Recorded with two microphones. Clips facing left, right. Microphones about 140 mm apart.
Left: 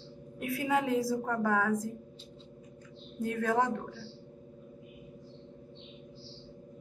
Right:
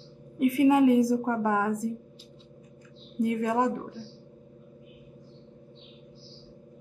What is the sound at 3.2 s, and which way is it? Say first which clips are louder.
Speech: right 4 dB; 15° right (ahead or behind).